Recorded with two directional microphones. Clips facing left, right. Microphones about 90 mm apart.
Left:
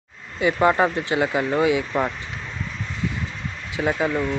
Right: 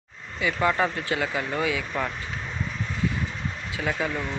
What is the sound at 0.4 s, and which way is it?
Speech, 30° left (ahead or behind).